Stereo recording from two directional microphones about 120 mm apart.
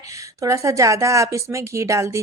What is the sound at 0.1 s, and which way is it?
A woman's voice, 25° right (ahead or behind).